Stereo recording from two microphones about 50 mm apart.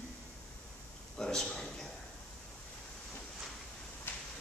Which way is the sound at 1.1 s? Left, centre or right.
Centre.